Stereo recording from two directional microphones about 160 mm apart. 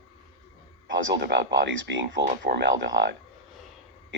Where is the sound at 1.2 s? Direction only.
90° right.